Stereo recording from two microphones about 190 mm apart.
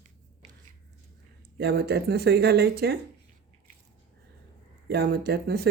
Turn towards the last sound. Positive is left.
turn(degrees=-55)  # may be behind; listen again after turning